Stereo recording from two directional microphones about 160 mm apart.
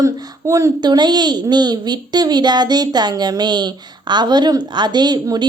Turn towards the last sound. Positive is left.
turn(degrees=-25)  # may be behind; listen again after turning